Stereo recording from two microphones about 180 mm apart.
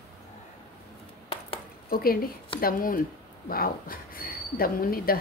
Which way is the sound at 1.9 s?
55° left (ahead or behind).